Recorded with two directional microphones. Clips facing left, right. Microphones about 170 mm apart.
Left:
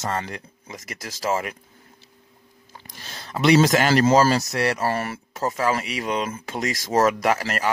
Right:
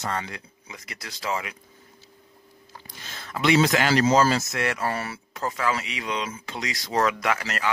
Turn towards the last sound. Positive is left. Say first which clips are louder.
# left 4 dB
turn(degrees=45)  # may be behind; listen again after turning